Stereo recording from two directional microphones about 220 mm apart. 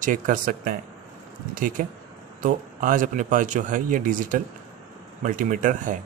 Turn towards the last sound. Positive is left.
turn(degrees=-35)  # may be behind; listen again after turning